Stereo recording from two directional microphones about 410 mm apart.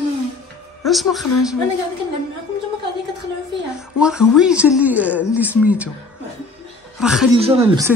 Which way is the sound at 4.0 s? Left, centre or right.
Centre.